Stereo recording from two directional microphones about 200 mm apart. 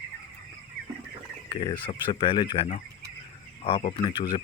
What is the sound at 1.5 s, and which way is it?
Speech, 25° left (ahead or behind).